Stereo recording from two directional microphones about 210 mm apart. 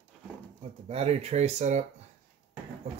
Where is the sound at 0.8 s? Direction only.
30° right (ahead or behind).